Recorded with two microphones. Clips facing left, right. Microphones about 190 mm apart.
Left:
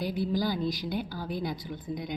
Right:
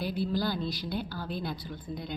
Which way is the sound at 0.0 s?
15° left (ahead or behind).